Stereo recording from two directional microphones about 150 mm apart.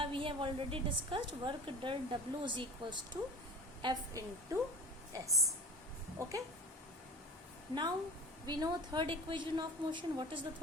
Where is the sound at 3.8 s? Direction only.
30° right (ahead or behind).